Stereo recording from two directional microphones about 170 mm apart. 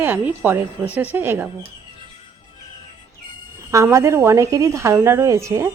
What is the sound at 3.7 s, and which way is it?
A woman's voice, 15° right (ahead or behind).